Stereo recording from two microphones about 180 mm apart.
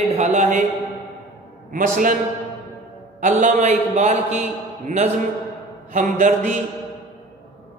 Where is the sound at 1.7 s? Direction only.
45° right (ahead or behind).